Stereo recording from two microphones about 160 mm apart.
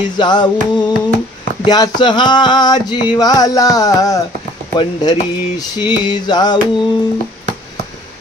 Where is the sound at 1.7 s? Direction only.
25° left (ahead or behind).